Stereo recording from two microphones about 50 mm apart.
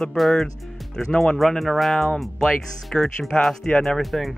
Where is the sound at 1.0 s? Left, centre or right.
Centre.